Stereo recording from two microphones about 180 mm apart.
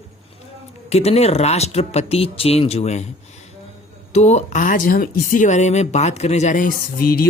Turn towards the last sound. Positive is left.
turn(degrees=55)  # may be behind; listen again after turning